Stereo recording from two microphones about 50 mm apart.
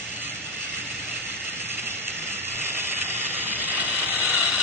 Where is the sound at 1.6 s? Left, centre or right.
Right.